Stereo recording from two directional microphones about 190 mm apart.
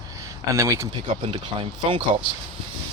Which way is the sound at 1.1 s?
30° right (ahead or behind).